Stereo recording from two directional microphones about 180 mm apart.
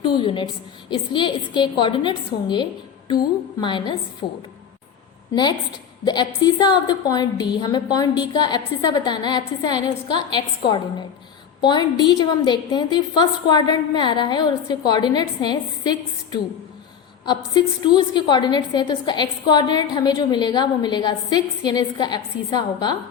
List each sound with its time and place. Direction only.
0.0 s a woman's voice: 25° left (ahead or behind)
5.3 s a woman's voice: 25° left (ahead or behind)
17.2 s a woman's voice: 25° left (ahead or behind)